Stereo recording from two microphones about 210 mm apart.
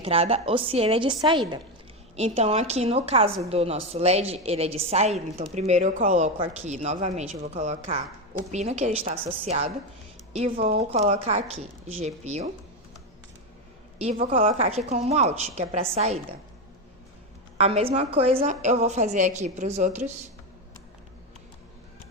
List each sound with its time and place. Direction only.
0.0 s a woman's voice: 30° right (ahead or behind)
14.0 s a woman's voice: 35° right (ahead or behind)
17.6 s speech: 30° right (ahead or behind)